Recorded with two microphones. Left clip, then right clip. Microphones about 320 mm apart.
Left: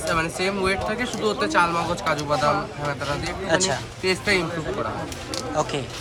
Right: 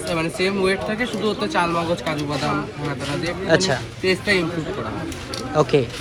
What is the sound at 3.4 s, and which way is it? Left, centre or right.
Speech, centre.